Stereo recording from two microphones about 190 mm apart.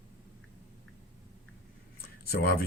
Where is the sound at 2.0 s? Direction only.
50° left (ahead or behind).